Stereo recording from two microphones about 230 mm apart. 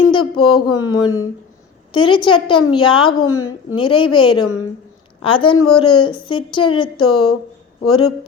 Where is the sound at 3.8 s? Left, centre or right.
Left.